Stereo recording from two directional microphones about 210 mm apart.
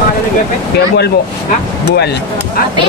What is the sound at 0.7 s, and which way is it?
Speech, 50° left (ahead or behind).